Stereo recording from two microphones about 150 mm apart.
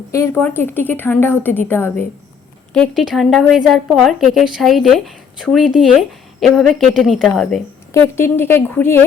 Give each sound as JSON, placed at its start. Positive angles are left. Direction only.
{"t": 0.1, "sound": "a woman's voice", "side_deg": 15}
{"t": 2.7, "sound": "a woman's voice", "side_deg": 5}
{"t": 7.9, "sound": "a woman's voice", "side_deg": 15}